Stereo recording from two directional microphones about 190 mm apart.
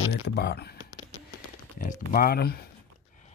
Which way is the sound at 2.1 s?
50° left (ahead or behind).